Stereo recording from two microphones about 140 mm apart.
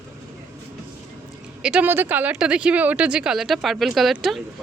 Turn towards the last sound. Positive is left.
turn(degrees=0)  # may be behind; listen again after turning